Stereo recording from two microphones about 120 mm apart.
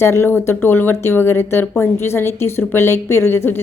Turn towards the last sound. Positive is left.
turn(degrees=20)  # may be behind; listen again after turning